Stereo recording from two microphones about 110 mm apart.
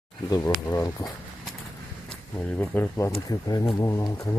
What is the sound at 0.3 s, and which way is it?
Speech, 30° left (ahead or behind).